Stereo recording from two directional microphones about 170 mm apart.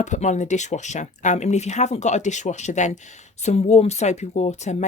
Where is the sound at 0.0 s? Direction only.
45° left (ahead or behind).